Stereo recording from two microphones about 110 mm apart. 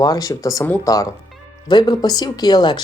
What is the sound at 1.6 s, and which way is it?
Speech, 40° left (ahead or behind).